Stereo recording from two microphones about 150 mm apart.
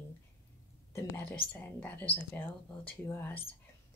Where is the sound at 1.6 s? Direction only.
10° left (ahead or behind).